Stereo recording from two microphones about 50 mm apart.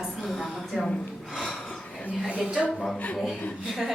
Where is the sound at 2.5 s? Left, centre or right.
Right.